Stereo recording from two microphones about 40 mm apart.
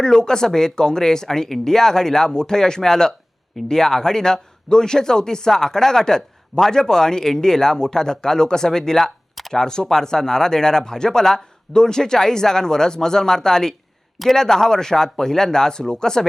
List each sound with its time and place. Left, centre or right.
0.0 s speech: centre